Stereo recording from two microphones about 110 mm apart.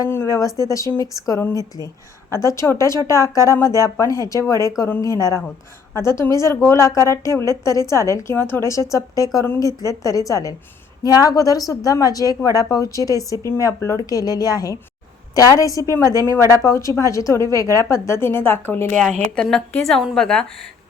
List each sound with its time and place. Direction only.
0.0 s a woman's voice: 25° left (ahead or behind)
19.4 s a woman's voice: 5° left (ahead or behind)